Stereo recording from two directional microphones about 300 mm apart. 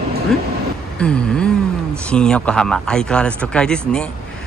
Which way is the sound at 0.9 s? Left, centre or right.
Centre.